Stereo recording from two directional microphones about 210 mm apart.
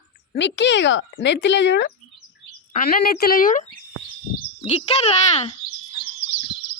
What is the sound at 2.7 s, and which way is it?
Speech, 45° left (ahead or behind).